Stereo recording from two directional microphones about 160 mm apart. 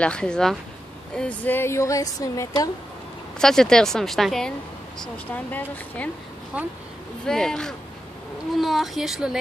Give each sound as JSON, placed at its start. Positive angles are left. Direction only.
{"t": 0.0, "sound": "a woman's voice", "side_deg": 5}
{"t": 3.3, "sound": "a woman's voice", "side_deg": 5}
{"t": 6.5, "sound": "speech", "side_deg": -10}
{"t": 7.2, "sound": "a woman's voice", "side_deg": 5}